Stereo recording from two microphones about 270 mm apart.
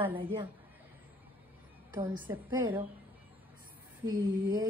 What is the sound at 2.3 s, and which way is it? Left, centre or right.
Speech, centre.